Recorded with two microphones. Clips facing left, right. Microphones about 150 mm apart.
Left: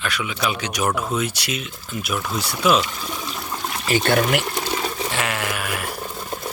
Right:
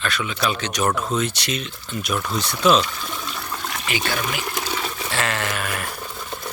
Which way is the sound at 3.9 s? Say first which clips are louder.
Left 8 dB; 50° left (ahead or behind).